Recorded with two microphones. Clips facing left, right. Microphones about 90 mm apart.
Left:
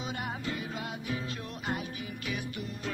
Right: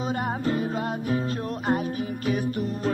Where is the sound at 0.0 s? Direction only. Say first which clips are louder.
Right 9 dB; 40° right (ahead or behind).